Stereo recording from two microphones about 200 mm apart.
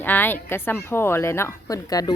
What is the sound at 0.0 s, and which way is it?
Speech, 10° left (ahead or behind).